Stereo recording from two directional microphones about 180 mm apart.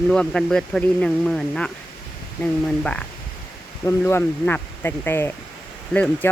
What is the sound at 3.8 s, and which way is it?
Speech, 15° left (ahead or behind).